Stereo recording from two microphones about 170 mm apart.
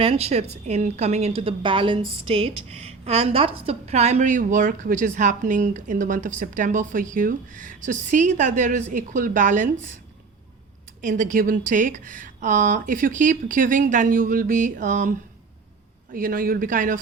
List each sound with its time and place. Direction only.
0.0 s a woman's voice: 35° right (ahead or behind)
11.0 s a woman's voice: 50° right (ahead or behind)
16.1 s speech: 55° right (ahead or behind)